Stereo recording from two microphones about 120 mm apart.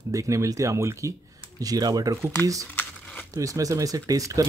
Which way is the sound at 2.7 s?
15° left (ahead or behind).